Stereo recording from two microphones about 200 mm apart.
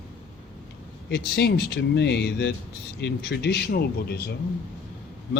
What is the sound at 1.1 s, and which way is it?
A man's voice, 55° left (ahead or behind).